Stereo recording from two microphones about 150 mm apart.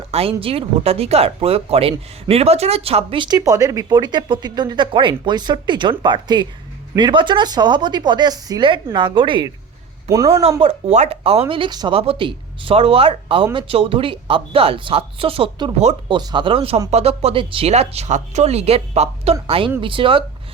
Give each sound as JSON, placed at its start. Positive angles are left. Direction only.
{"t": 0.1, "sound": "speech", "side_deg": -40}
{"t": 10.1, "sound": "a man's voice", "side_deg": -20}
{"t": 10.6, "sound": "speech", "side_deg": -40}
{"t": 15.8, "sound": "speech", "side_deg": -45}
{"t": 16.1, "sound": "speech", "side_deg": -30}